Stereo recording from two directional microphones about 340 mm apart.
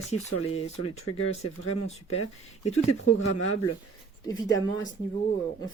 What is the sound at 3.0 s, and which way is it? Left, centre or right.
Speech, left.